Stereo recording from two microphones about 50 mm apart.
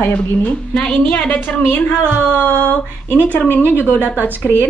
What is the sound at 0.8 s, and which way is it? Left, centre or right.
A woman's voice, centre.